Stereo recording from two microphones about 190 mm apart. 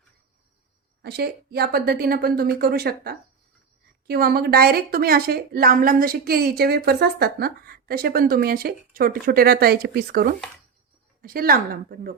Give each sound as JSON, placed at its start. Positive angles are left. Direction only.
{"t": 1.0, "sound": "a woman's voice", "side_deg": -55}